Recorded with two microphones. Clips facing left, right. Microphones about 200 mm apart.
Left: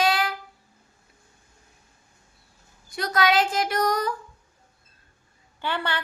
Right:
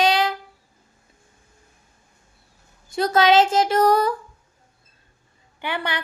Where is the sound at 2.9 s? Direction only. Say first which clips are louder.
Right 6 dB; 25° right (ahead or behind).